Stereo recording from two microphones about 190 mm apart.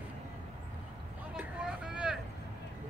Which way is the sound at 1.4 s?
5° right (ahead or behind).